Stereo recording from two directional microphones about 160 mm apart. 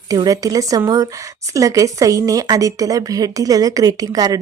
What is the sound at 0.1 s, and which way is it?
Speech, 20° right (ahead or behind).